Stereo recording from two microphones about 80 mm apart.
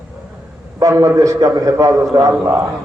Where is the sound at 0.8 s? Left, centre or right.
Right.